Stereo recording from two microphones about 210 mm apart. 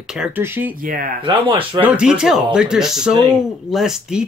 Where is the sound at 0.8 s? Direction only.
45° right (ahead or behind).